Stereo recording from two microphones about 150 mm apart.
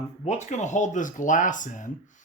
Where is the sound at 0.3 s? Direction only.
50° left (ahead or behind).